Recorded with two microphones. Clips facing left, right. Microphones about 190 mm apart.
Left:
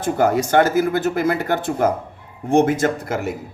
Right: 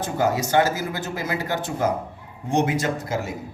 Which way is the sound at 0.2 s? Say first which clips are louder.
Left 4 dB; 55° left (ahead or behind).